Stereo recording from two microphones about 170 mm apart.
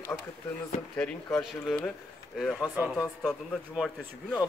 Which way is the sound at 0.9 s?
5° left (ahead or behind).